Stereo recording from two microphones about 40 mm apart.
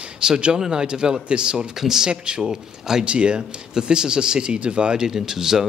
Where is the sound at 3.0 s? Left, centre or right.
Right.